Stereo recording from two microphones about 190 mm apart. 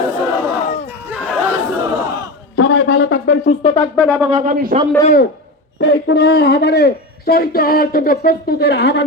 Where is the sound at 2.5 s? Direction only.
85° left; by 3.6 s 55° left (ahead or behind).